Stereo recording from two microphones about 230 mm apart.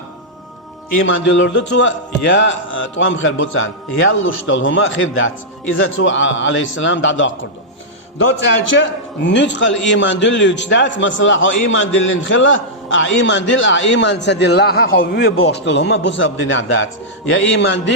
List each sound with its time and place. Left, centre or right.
1.0 s a man's voice: left
8.7 s a man's voice: left